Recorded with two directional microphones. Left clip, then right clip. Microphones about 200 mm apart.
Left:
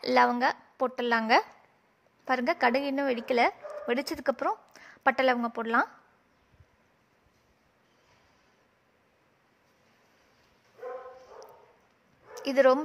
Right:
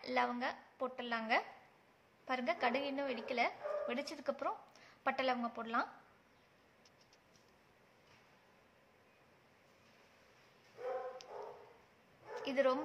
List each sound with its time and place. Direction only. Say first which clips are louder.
0.0 s a woman's voice: left 13 dB; 55° left (ahead or behind)
12.4 s speech: left 12 dB; 50° left (ahead or behind)